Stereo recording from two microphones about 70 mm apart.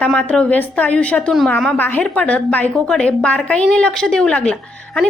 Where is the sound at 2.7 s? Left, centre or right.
Centre.